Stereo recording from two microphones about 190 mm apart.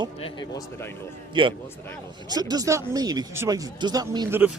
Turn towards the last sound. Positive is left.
turn(degrees=-20)  # may be behind; listen again after turning